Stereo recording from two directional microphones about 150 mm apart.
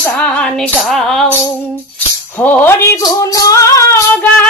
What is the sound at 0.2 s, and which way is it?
Music, 5° left (ahead or behind).